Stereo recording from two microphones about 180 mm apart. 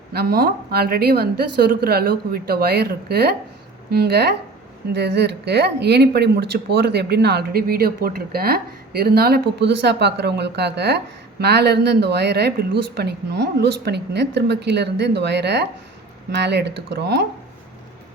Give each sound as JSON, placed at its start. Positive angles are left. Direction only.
{"t": 0.1, "sound": "a woman's voice", "side_deg": -60}